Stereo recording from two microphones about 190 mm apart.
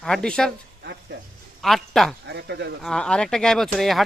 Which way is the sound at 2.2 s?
65° right (ahead or behind).